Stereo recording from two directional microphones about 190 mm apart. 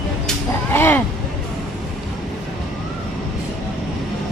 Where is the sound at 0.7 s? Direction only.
10° left (ahead or behind).